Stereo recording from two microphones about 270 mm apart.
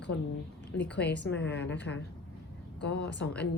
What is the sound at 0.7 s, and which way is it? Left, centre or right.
Speech, left.